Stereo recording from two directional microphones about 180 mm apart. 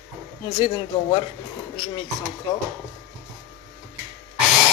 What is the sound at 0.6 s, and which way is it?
Speech, 25° left (ahead or behind).